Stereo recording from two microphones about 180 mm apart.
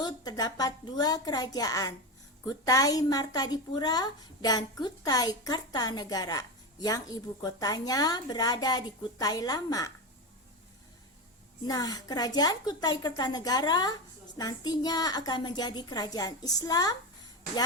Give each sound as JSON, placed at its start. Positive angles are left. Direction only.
{"t": 0.0, "sound": "a woman's voice", "side_deg": 20}
{"t": 11.6, "sound": "a woman's voice", "side_deg": 20}